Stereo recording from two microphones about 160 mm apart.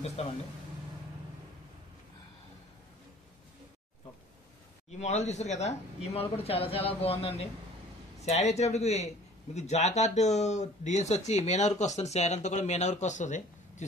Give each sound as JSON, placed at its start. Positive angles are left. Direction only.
{"t": 0.2, "sound": "speech", "side_deg": 40}
{"t": 5.0, "sound": "a man's voice", "side_deg": 45}